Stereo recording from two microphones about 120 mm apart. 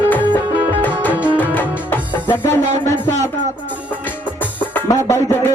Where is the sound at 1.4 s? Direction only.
15° left (ahead or behind).